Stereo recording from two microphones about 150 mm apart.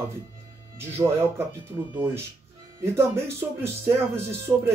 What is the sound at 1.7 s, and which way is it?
Speech, 20° right (ahead or behind).